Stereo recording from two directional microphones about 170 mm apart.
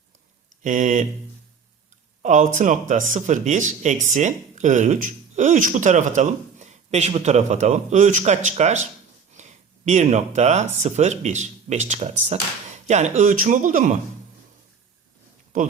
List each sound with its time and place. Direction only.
0.6 s speech: 50° right (ahead or behind)
2.2 s speech: 45° right (ahead or behind)